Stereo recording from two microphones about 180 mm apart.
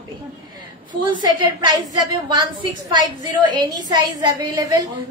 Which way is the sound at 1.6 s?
20° right (ahead or behind).